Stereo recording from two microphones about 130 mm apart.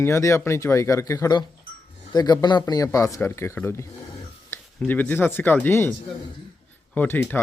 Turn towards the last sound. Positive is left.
turn(degrees=15)  # may be behind; listen again after turning